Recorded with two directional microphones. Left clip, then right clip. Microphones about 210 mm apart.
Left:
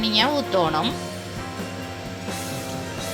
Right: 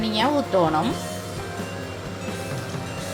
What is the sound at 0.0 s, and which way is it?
Speech, 5° right (ahead or behind).